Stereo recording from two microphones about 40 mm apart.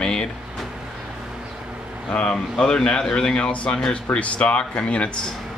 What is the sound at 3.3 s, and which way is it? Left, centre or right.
Speech, left.